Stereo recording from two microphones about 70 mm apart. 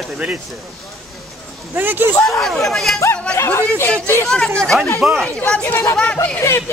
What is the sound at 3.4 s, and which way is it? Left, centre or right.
Speech, left.